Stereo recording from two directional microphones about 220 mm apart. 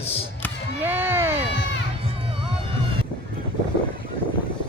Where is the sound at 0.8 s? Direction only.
10° right (ahead or behind).